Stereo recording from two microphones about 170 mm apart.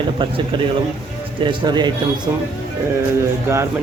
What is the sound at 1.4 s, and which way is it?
Speech, 25° right (ahead or behind).